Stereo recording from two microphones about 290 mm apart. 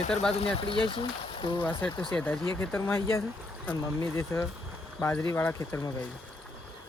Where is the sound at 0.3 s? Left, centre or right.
Centre.